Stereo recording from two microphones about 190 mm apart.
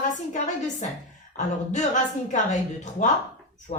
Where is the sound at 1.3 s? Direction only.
40° left (ahead or behind).